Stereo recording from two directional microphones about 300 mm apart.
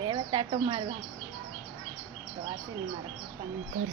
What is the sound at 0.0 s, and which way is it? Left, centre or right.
Bird, centre.